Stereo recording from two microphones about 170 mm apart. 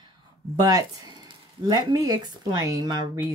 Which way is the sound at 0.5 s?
20° right (ahead or behind).